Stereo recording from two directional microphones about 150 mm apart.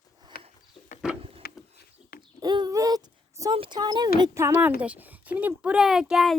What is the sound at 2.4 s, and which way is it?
Child singing, 25° right (ahead or behind).